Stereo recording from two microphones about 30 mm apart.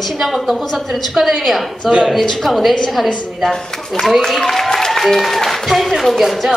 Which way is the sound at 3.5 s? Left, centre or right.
Centre.